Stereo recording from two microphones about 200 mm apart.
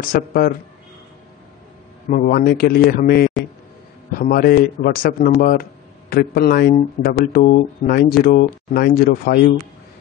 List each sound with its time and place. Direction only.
0.0 s speech: 50° left (ahead or behind)
2.0 s speech: 40° left (ahead or behind)